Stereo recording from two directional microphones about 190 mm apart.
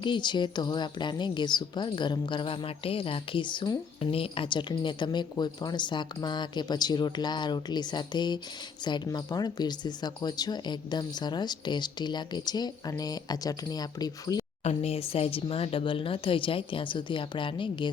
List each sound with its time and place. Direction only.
0.0 s a woman's voice: 25° left (ahead or behind)
14.6 s a woman's voice: 35° left (ahead or behind)